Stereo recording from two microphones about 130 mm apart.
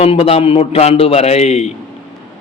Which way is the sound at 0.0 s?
50° left (ahead or behind).